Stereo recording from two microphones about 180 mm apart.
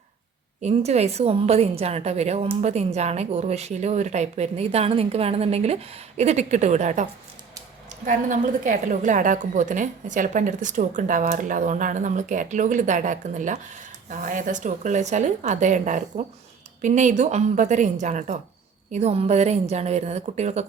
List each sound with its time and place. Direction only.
0.6 s a woman's voice: 35° right (ahead or behind)